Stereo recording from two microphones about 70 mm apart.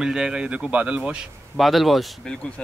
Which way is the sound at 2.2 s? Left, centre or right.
Centre.